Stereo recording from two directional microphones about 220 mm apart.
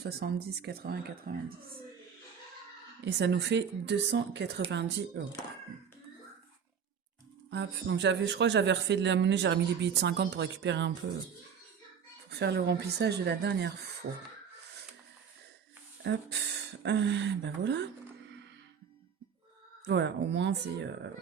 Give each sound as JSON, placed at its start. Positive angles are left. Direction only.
{"t": 0.0, "sound": "speech", "side_deg": -45}
{"t": 3.0, "sound": "speech", "side_deg": -50}
{"t": 7.5, "sound": "speech", "side_deg": -50}
{"t": 12.3, "sound": "speech", "side_deg": -45}
{"t": 16.0, "sound": "speech", "side_deg": -50}
{"t": 19.8, "sound": "speech", "side_deg": -50}